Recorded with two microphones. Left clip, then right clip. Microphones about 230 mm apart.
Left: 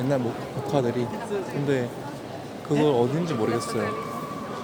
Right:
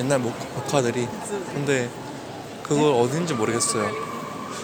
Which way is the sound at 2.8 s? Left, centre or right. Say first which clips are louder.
Right 2 dB; centre.